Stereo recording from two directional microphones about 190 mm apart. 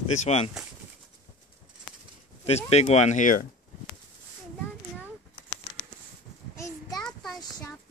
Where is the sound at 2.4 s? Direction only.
35° left (ahead or behind).